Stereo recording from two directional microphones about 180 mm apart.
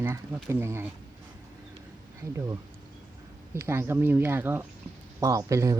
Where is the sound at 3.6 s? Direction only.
15° right (ahead or behind).